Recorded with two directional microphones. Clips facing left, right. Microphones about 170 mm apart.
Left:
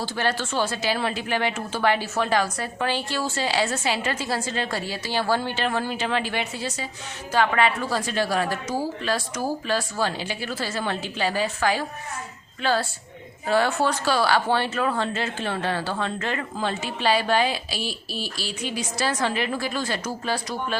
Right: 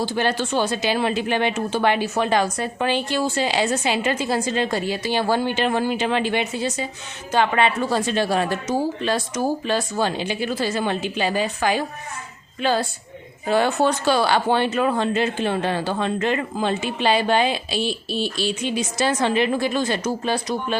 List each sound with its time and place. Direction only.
0.0 s a woman's voice: 20° right (ahead or behind)